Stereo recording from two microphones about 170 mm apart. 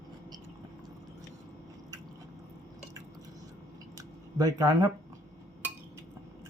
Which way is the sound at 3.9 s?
20° right (ahead or behind).